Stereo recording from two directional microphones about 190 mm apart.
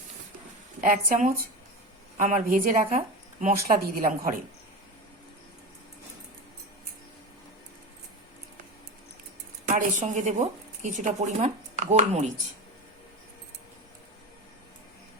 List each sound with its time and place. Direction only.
0.8 s speech: 45° right (ahead or behind)
9.6 s a woman's voice: 40° right (ahead or behind)